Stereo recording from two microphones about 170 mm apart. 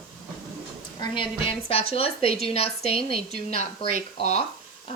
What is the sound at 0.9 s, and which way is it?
Speech, 30° left (ahead or behind).